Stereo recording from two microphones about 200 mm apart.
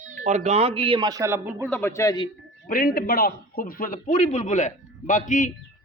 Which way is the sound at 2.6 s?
45° left (ahead or behind).